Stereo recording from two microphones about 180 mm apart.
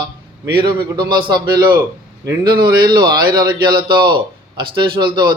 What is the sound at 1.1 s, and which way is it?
Speech, 25° right (ahead or behind).